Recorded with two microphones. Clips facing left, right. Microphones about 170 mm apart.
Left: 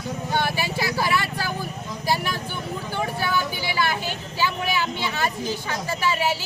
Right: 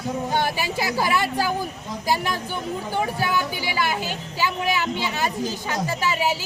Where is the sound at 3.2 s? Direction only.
15° right (ahead or behind).